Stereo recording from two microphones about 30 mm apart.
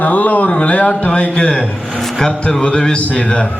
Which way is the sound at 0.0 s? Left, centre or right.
Left.